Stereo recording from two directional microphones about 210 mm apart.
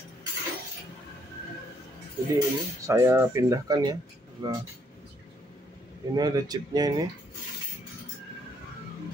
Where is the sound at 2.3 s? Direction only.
15° right (ahead or behind).